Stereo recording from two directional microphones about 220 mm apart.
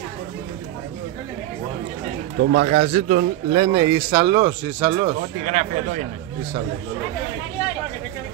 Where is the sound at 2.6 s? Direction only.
30° right (ahead or behind).